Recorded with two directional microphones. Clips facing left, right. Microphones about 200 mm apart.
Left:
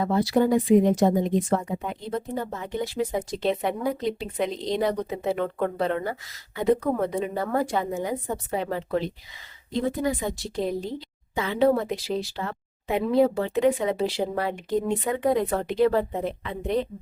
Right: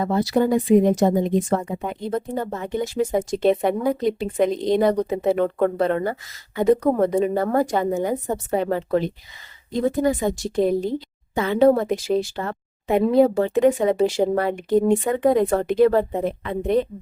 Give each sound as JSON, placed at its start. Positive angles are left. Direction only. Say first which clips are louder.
{"t": 0.0, "sound": "speech", "louder": "right 2 dB", "side_deg": -45}